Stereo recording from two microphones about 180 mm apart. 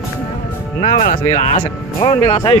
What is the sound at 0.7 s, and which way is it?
Speech, 40° left (ahead or behind).